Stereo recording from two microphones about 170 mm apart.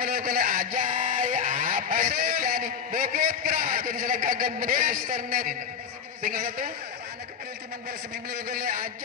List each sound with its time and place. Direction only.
0.0 s a sound: 60° right (ahead or behind)
6.2 s a man's voice: 55° right (ahead or behind)
8.3 s a man's voice: 60° right (ahead or behind)